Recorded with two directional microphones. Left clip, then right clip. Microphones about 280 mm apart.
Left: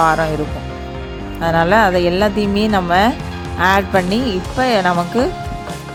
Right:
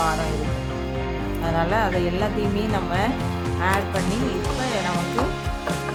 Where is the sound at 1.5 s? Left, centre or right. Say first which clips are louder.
Left 10 dB; left.